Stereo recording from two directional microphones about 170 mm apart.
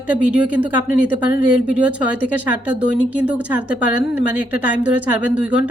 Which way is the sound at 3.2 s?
10° right (ahead or behind).